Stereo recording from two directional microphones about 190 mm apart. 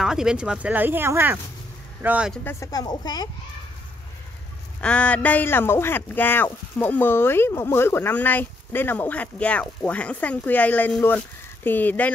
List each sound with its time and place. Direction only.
0.0 s speech: 5° right (ahead or behind)
2.4 s a woman's voice: 15° left (ahead or behind)
4.7 s a man's voice: 5° left (ahead or behind)